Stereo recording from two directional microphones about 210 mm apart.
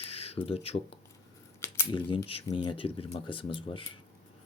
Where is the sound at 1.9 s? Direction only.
25° left (ahead or behind).